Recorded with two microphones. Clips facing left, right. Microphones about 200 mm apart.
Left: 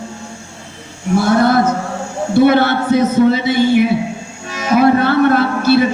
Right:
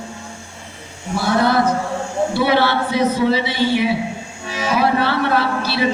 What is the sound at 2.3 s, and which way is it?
Speech, 45° left (ahead or behind).